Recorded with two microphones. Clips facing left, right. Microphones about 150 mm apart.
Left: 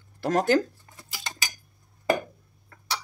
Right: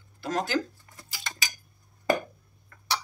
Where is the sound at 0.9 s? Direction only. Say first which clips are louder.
Left 1 dB; 25° left (ahead or behind).